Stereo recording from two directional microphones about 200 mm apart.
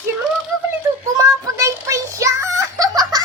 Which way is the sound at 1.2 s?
15° right (ahead or behind).